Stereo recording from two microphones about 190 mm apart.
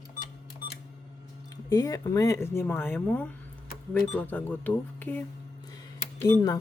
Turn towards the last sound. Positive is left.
turn(degrees=20)  # may be behind; listen again after turning